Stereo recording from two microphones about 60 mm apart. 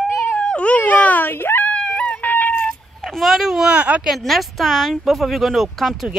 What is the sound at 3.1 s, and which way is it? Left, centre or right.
Speech, centre.